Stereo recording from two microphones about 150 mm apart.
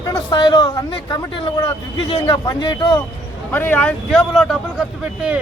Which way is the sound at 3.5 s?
10° left (ahead or behind).